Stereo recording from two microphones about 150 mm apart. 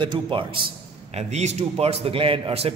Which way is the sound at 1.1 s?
45° right (ahead or behind).